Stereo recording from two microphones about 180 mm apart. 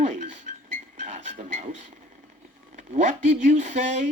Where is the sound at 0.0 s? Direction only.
45° right (ahead or behind).